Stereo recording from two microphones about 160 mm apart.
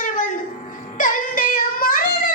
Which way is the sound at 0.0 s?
55° left (ahead or behind).